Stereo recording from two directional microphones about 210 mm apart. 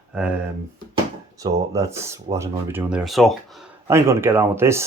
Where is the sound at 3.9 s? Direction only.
10° right (ahead or behind).